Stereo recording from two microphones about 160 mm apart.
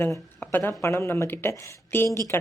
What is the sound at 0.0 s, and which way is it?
A woman's voice, 15° left (ahead or behind).